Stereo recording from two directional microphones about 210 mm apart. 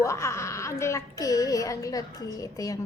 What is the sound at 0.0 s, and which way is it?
Speech, 15° left (ahead or behind).